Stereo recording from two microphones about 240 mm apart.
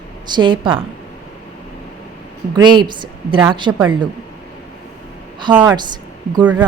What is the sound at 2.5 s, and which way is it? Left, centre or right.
A woman's voice, centre.